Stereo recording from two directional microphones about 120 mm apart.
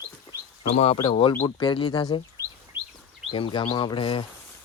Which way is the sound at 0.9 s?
45° left (ahead or behind).